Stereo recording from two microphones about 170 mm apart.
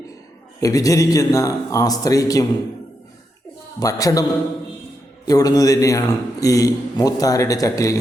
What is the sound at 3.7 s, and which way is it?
Speech, 20° left (ahead or behind).